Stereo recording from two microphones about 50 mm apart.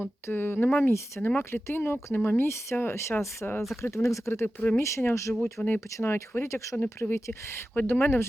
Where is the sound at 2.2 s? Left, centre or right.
Left.